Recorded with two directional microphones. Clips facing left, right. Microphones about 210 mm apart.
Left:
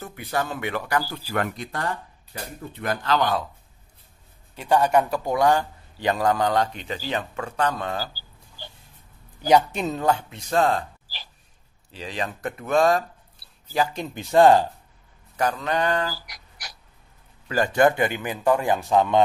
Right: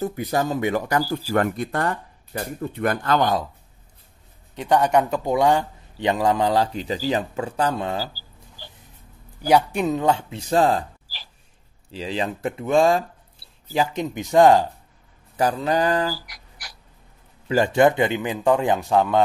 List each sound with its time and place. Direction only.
0.0 s speech: 40° right (ahead or behind)
4.6 s a man's voice: 15° right (ahead or behind)
9.4 s a man's voice: 10° right (ahead or behind); by 10.9 s 30° right (ahead or behind)
11.9 s a man's voice: 30° right (ahead or behind)
15.3 s speech: 30° right (ahead or behind)
16.3 s dog: 20° left (ahead or behind)
17.5 s a man's voice: 25° right (ahead or behind)
18.9 s speech: 5° right (ahead or behind)